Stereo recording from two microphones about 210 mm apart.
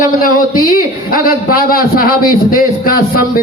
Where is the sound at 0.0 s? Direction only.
40° left (ahead or behind).